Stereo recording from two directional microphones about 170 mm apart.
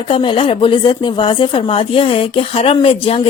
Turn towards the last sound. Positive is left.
turn(degrees=35)  # may be behind; listen again after turning